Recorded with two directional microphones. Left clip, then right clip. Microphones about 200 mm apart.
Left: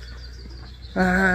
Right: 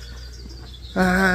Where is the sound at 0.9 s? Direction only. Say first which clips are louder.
Right 1 dB; 5° left (ahead or behind).